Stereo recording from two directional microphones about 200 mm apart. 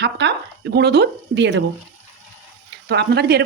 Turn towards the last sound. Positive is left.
turn(degrees=-55)  # may be behind; listen again after turning